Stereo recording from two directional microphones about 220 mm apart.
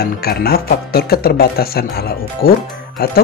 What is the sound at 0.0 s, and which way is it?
Speech, 45° left (ahead or behind).